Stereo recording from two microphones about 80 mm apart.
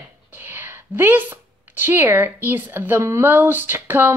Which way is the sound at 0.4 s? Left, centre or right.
Right.